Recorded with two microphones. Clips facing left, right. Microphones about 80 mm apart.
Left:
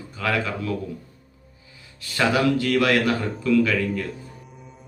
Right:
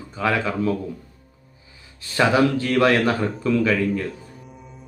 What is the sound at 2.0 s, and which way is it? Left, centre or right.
Speech, right.